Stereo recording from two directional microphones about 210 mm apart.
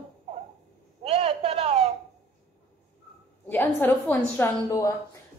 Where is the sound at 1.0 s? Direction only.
30° right (ahead or behind).